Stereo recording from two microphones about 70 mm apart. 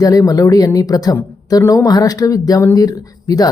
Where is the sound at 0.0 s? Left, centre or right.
Left.